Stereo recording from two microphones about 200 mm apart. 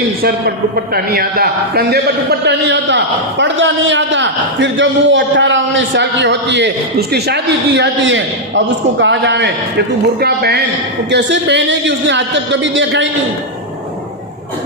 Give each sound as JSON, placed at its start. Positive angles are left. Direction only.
{"t": 0.9, "sound": "a man's voice", "side_deg": -50}